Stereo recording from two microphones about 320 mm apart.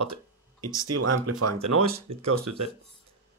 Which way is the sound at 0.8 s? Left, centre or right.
Right.